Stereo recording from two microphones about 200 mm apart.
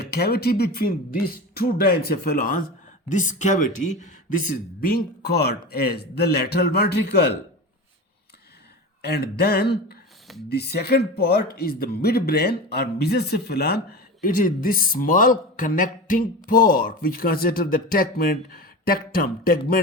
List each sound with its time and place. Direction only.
0.0 s speech: 55° left (ahead or behind)
9.0 s speech: 55° left (ahead or behind)